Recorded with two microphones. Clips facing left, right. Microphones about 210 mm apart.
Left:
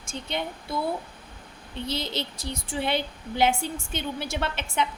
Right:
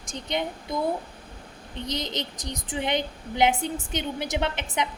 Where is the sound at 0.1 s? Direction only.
15° right (ahead or behind).